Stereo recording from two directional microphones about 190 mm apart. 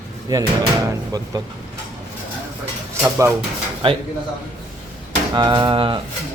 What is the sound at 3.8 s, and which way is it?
Speech, 30° right (ahead or behind).